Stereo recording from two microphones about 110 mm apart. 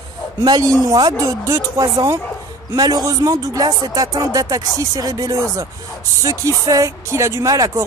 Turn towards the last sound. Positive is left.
turn(degrees=-30)  # may be behind; listen again after turning